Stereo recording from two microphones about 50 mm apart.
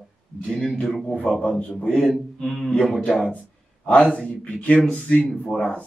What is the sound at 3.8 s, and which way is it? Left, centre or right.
Speech, left.